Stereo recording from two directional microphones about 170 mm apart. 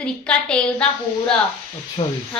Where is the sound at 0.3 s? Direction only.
5° left (ahead or behind).